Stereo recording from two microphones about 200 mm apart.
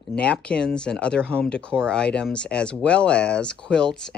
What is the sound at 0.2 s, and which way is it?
Speech, 5° left (ahead or behind).